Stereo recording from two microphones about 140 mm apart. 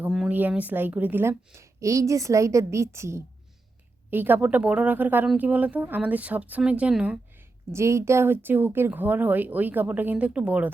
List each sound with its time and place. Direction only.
0.1 s a woman's voice: 5° right (ahead or behind)
7.7 s speech: 20° right (ahead or behind)